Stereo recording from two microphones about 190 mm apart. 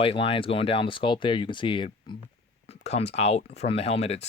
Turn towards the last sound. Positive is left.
turn(degrees=35)  # may be behind; listen again after turning